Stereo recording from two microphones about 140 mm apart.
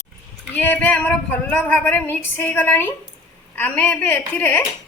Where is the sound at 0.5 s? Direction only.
10° left (ahead or behind).